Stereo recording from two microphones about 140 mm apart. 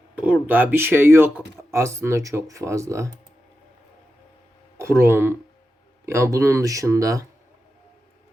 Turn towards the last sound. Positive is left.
turn(degrees=-25)  # may be behind; listen again after turning